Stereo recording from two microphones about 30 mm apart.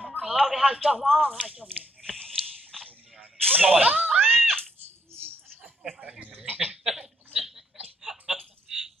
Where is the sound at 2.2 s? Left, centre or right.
Centre.